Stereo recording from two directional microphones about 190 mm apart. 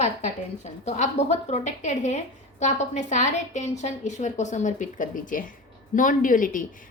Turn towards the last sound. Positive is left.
turn(degrees=45)  # may be behind; listen again after turning